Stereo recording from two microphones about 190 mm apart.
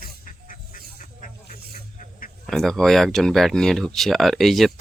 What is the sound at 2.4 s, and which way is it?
Speech, centre (ahead or behind).